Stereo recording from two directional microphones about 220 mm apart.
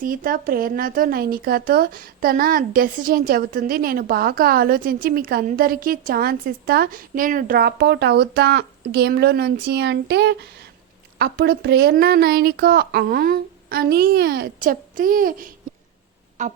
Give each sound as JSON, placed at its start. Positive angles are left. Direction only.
{"t": 0.0, "sound": "speech", "side_deg": -40}